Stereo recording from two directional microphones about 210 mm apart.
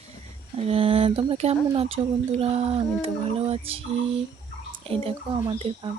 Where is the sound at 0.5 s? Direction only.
25° right (ahead or behind).